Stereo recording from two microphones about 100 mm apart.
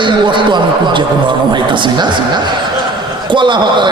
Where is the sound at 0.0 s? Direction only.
55° right (ahead or behind).